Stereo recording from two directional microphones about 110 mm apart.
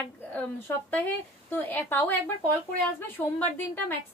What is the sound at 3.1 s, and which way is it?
Speech, 15° left (ahead or behind).